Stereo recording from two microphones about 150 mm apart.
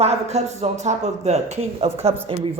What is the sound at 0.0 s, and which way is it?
Speech, 45° right (ahead or behind).